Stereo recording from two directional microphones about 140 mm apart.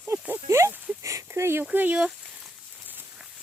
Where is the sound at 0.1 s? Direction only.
20° right (ahead or behind).